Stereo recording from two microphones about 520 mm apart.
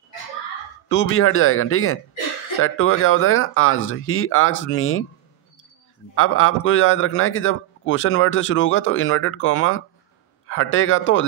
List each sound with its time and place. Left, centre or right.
0.8 s a man's voice: left
6.1 s a man's voice: left